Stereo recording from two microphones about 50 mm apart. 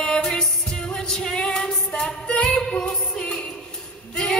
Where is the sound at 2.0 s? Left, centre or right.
Left.